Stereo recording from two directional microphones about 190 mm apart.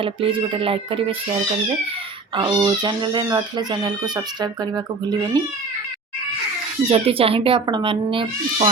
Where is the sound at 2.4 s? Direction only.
20° right (ahead or behind).